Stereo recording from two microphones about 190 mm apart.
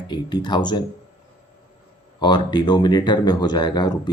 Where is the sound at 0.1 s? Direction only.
25° left (ahead or behind).